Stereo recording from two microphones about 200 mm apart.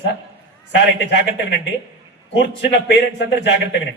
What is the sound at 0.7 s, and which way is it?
Speech, 60° left (ahead or behind).